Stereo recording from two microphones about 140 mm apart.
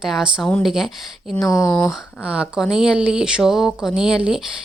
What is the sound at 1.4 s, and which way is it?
Speech, 25° left (ahead or behind).